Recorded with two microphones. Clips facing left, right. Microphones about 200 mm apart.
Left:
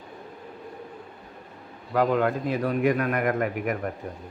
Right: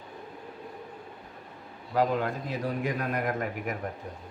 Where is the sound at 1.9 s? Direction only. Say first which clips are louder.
Left 4 dB; 65° left (ahead or behind).